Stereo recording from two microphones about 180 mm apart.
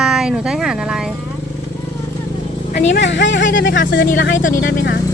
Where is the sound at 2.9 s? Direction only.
80° left.